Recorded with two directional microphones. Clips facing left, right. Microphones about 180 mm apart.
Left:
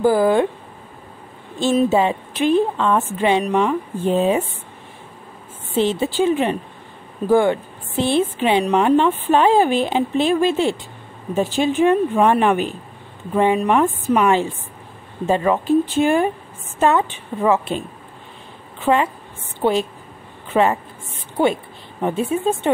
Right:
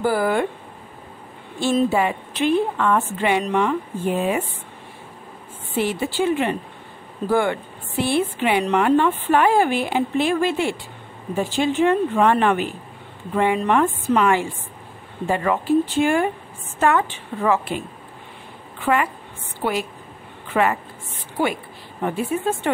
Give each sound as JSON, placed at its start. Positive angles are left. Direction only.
{"t": 0.0, "sound": "speech", "side_deg": 15}
{"t": 1.9, "sound": "a woman's voice", "side_deg": 20}
{"t": 4.1, "sound": "a woman's voice", "side_deg": 25}
{"t": 5.8, "sound": "a woman's voice", "side_deg": 20}
{"t": 18.9, "sound": "speech", "side_deg": 10}
{"t": 19.6, "sound": "a woman's voice", "side_deg": 25}
{"t": 22.0, "sound": "a woman's voice", "side_deg": 20}